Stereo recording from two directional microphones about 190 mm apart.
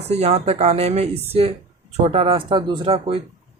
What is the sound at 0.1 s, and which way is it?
Speech, 35° right (ahead or behind).